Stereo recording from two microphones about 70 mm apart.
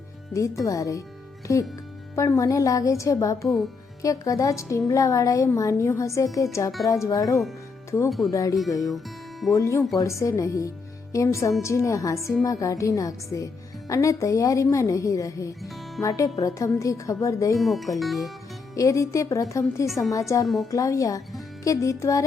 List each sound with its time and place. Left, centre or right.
0.3 s a woman's voice: left
7.9 s a woman's voice: left
9.6 s a woman's voice: left
17.6 s speech: centre
18.7 s a woman's voice: left